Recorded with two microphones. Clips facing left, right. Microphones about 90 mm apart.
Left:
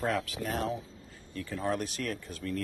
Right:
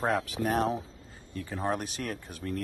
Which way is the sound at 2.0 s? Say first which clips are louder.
Even; 45° right (ahead or behind).